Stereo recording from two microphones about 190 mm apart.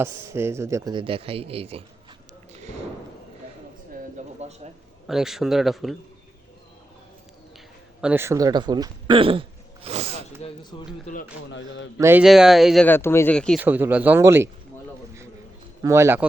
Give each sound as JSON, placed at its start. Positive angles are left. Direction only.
{"t": 0.0, "sound": "speech", "side_deg": -15}
{"t": 4.4, "sound": "a sound", "side_deg": -35}
{"t": 5.0, "sound": "speech", "side_deg": 0}
{"t": 8.0, "sound": "speech", "side_deg": -10}
{"t": 10.4, "sound": "speech", "side_deg": 25}
{"t": 11.0, "sound": "speech", "side_deg": 45}
{"t": 11.5, "sound": "a man's voice", "side_deg": 75}
{"t": 11.9, "sound": "speech", "side_deg": -15}
{"t": 12.2, "sound": "speech", "side_deg": 0}
{"t": 13.6, "sound": "speech", "side_deg": -10}
{"t": 15.8, "sound": "speech", "side_deg": -15}